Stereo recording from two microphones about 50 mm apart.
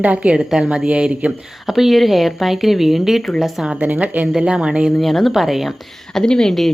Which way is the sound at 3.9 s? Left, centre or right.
Right.